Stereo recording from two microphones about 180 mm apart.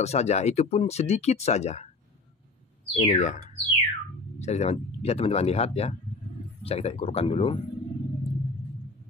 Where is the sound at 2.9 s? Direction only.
40° left (ahead or behind).